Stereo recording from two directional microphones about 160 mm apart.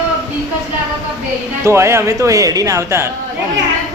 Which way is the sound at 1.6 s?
15° right (ahead or behind).